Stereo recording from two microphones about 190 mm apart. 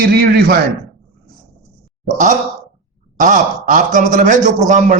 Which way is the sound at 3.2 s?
45° right (ahead or behind).